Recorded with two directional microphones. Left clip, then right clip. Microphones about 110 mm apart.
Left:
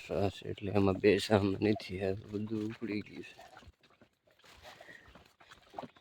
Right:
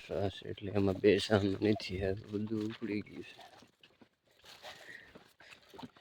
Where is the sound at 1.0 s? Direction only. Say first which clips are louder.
Right 1 dB; centre (ahead or behind).